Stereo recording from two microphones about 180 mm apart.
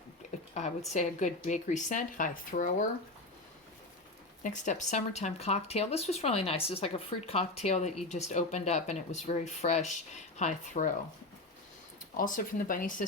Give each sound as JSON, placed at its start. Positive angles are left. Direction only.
{"t": 0.9, "sound": "speech", "side_deg": 40}
{"t": 4.4, "sound": "speech", "side_deg": 45}
{"t": 12.1, "sound": "speech", "side_deg": 50}